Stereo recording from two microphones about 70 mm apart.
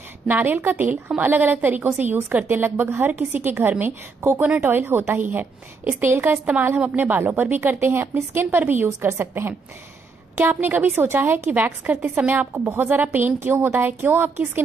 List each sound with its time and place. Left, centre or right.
0.3 s a woman's voice: right